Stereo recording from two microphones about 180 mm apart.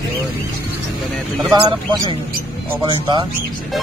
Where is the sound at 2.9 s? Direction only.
25° right (ahead or behind).